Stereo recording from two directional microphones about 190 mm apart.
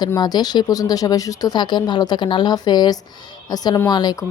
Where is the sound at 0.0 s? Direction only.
20° left (ahead or behind).